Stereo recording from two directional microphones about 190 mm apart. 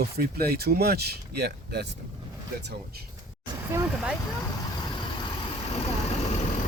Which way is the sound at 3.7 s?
15° right (ahead or behind).